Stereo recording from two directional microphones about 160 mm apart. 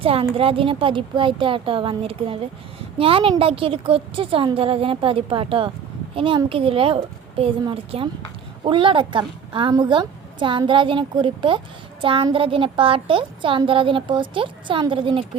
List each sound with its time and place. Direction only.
0.0 s a woman's voice: 35° right (ahead or behind)